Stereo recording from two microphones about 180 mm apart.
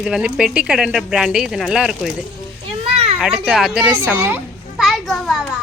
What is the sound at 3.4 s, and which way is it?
A child's voice, 5° right (ahead or behind).